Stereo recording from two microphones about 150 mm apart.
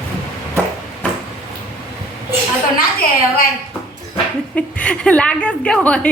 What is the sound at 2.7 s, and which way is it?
Speech, 75° left (ahead or behind).